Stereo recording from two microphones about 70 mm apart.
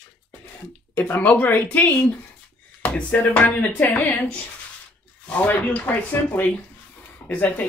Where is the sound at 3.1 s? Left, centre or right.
Left.